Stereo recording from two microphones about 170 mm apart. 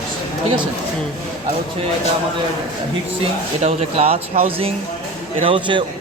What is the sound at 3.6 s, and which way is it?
Speech, 35° right (ahead or behind).